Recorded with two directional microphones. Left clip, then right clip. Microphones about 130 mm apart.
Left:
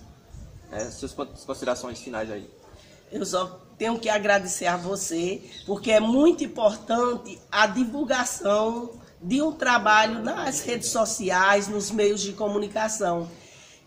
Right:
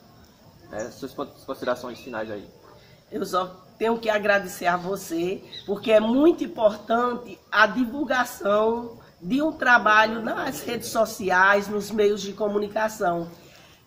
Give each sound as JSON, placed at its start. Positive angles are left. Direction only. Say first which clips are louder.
{"t": 0.7, "sound": "a man's voice", "louder": "even", "side_deg": -5}
{"t": 3.1, "sound": "a man's voice", "louder": "right 1 dB", "side_deg": 35}